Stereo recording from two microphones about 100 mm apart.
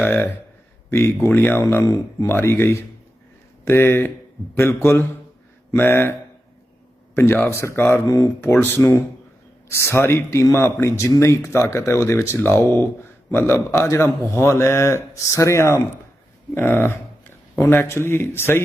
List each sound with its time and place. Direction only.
0.0 s speech: 20° left (ahead or behind)
7.2 s speech: 25° left (ahead or behind)